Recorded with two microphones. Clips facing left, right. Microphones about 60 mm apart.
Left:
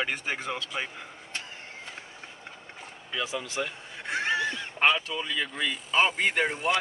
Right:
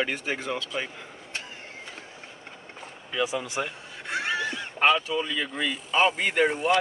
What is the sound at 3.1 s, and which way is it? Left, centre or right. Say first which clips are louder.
Speech: right 4 dB; centre.